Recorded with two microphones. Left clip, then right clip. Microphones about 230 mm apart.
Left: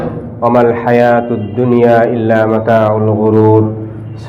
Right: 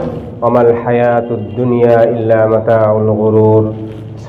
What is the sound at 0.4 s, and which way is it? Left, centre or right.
A man's voice, left.